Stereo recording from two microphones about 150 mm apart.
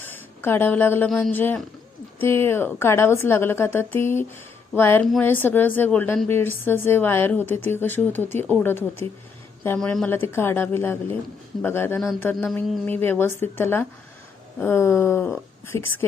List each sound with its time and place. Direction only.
0.0 s a sound: 15° left (ahead or behind)
1.1 s a woman's voice: 10° left (ahead or behind)
9.7 s a woman's voice: 5° left (ahead or behind)
10.1 s a woman's voice: 15° left (ahead or behind)